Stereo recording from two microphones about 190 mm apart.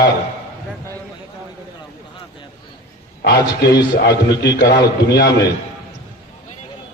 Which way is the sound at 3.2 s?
60° left (ahead or behind).